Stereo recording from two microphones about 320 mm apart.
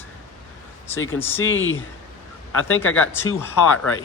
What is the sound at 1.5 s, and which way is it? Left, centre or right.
Speech, left.